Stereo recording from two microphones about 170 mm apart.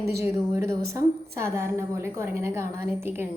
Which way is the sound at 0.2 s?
15° right (ahead or behind).